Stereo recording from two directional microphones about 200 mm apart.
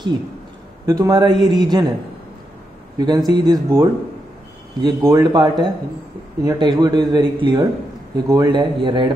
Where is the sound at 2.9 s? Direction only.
20° right (ahead or behind).